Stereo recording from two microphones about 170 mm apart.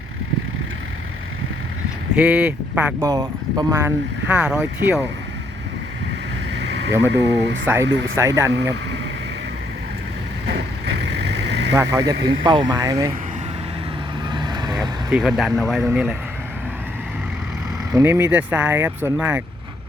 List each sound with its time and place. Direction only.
2.1 s speech: 5° right (ahead or behind)
3.1 s speech: 20° right (ahead or behind)
4.3 s speech: 5° right (ahead or behind)
6.5 s vehicle: 80° right
7.1 s speech: 85° right
7.6 s speech: 15° right (ahead or behind)
11.3 s vehicle: 80° right
11.7 s speech: 20° right (ahead or behind)
14.3 s vehicle: 25° right (ahead or behind)
14.7 s speech: 5° right (ahead or behind)
17.9 s speech: 15° right (ahead or behind)